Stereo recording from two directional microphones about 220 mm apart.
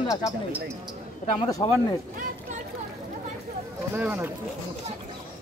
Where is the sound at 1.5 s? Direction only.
15° left (ahead or behind).